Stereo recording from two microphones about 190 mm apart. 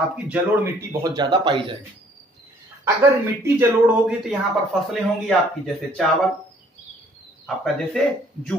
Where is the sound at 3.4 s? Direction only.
15° right (ahead or behind).